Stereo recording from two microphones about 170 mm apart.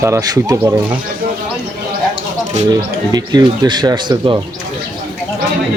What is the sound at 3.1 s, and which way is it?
Speech, 25° right (ahead or behind).